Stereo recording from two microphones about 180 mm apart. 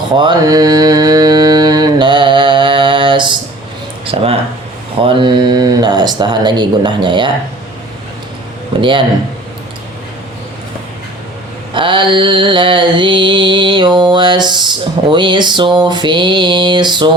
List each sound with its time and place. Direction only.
0.2 s mantra: 25° right (ahead or behind)
4.0 s speech: 30° right (ahead or behind)
5.0 s mantra: 25° right (ahead or behind)
8.8 s mantra: 30° right (ahead or behind)
11.7 s mantra: 25° right (ahead or behind)